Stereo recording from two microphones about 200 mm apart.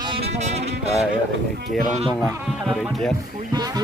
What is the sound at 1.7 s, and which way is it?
Speech, centre (ahead or behind).